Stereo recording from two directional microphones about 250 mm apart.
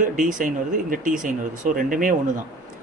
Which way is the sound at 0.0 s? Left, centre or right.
Right.